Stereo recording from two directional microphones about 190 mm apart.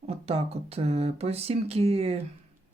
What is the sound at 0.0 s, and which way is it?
Speech, 30° right (ahead or behind).